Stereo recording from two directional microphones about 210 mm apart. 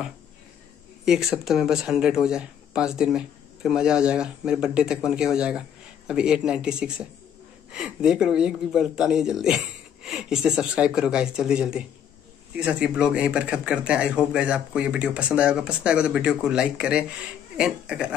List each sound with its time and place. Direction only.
1.0 s speech: 5° right (ahead or behind)